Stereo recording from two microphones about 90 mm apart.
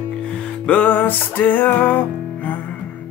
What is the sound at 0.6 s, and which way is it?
Music, 15° left (ahead or behind).